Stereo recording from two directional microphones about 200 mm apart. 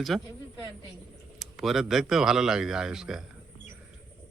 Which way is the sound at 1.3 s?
Centre (ahead or behind).